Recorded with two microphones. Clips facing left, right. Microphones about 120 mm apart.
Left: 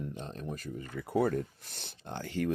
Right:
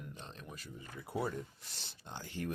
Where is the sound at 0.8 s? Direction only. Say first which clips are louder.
Left 9 dB; 65° left (ahead or behind).